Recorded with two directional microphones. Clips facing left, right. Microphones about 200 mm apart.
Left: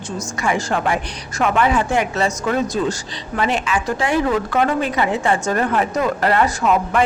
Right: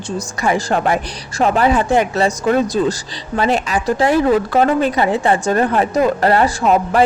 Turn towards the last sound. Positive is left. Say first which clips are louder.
# right 3 dB
turn(degrees=-35)  # may be behind; listen again after turning